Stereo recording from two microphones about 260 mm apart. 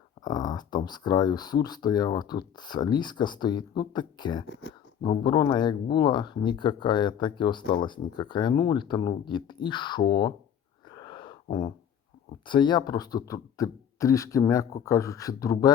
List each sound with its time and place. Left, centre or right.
0.2 s a sound: centre
0.9 s speech: centre
4.4 s speech: left
5.0 s speech: centre
10.8 s wheeze: centre
12.5 s speech: centre